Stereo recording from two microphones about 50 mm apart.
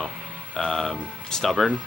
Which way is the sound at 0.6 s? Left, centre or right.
Centre.